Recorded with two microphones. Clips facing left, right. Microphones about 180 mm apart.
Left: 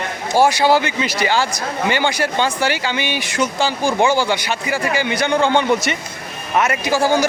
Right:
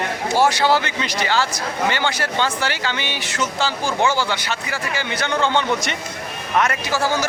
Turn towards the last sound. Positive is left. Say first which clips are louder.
# left 5 dB
turn(degrees=15)  # may be behind; listen again after turning